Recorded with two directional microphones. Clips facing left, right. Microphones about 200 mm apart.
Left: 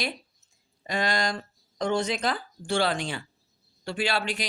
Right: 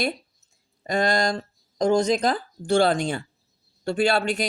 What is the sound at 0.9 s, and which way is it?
Speech, 45° right (ahead or behind).